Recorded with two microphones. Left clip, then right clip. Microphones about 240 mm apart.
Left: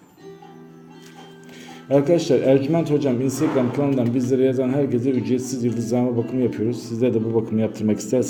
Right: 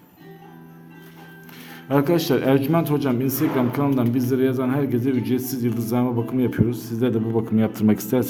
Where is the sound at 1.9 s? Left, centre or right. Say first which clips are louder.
Left 3 dB; centre.